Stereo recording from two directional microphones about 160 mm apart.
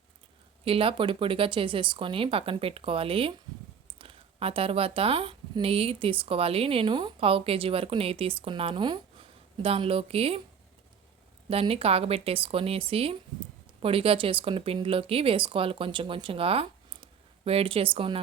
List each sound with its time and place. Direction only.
0.6 s speech: 35° right (ahead or behind)
11.4 s speech: 35° right (ahead or behind)